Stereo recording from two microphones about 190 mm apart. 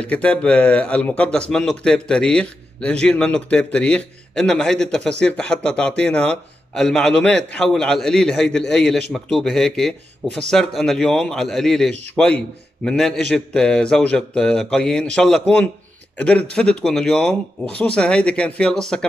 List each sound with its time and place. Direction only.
0.0 s a man's voice: 5° left (ahead or behind)